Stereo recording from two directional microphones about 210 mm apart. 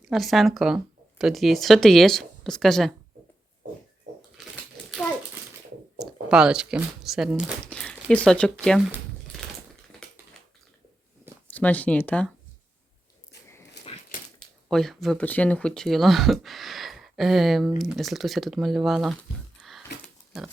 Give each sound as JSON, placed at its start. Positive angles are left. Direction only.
{"t": 0.1, "sound": "speech", "side_deg": 0}
{"t": 6.0, "sound": "speech", "side_deg": -5}
{"t": 10.0, "sound": "a sound", "side_deg": 5}
{"t": 11.4, "sound": "speech", "side_deg": 5}
{"t": 13.8, "sound": "dog", "side_deg": 55}
{"t": 14.7, "sound": "speech", "side_deg": 0}
{"t": 19.5, "sound": "a sound", "side_deg": 0}